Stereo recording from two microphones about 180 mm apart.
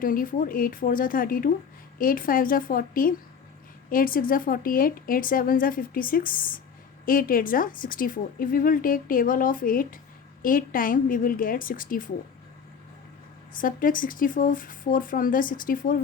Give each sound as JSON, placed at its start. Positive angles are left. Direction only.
{"t": 0.0, "sound": "speech", "side_deg": 50}
{"t": 13.5, "sound": "speech", "side_deg": 50}